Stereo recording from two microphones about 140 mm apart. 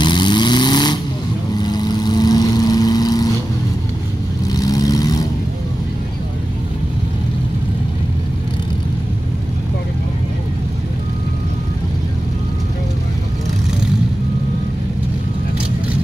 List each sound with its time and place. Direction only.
0.0 s vehicle: 35° left (ahead or behind)
4.5 s vehicle: 25° left (ahead or behind)